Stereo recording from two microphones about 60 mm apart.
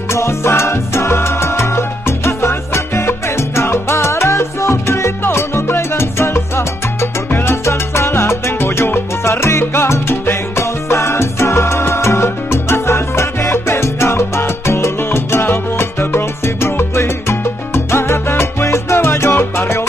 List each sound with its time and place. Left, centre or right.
0.1 s music: left
7.6 s salsa music: left